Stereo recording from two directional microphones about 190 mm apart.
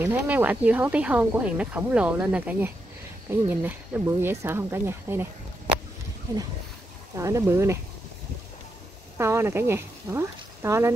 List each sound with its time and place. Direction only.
0.0 s speech: 10° right (ahead or behind)
7.2 s speech: 15° right (ahead or behind)
9.2 s speech: 15° right (ahead or behind)